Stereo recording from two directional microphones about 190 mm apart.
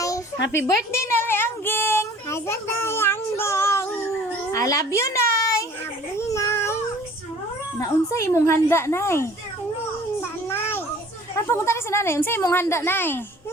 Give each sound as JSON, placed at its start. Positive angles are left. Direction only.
{"t": 0.3, "sound": "speech", "side_deg": 70}
{"t": 0.9, "sound": "a child's voice", "side_deg": 10}
{"t": 6.1, "sound": "a sound", "side_deg": 15}
{"t": 7.8, "sound": "a woman's voice", "side_deg": 15}
{"t": 10.5, "sound": "children playing", "side_deg": 10}
{"t": 11.3, "sound": "a woman's voice", "side_deg": 15}